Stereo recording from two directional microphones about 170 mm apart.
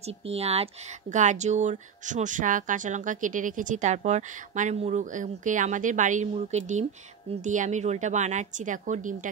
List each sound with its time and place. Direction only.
0.0 s speech: 35° right (ahead or behind)